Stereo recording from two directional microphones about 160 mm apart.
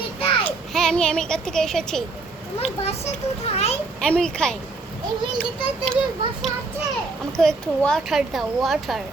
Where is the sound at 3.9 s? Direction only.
5° left (ahead or behind).